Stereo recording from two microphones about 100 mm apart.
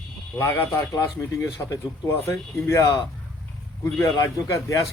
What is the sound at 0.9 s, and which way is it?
Speech, 35° left (ahead or behind).